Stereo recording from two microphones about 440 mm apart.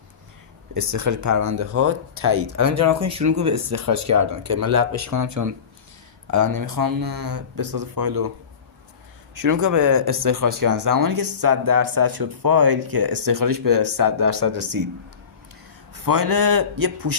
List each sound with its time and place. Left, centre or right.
0.7 s speech: right
9.3 s speech: right
16.0 s speech: right